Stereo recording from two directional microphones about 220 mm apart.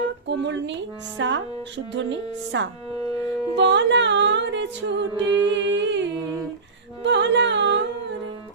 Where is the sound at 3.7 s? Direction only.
55° right (ahead or behind).